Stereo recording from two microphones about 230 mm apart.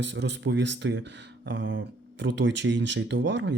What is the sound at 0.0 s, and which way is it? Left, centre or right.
Speech, right.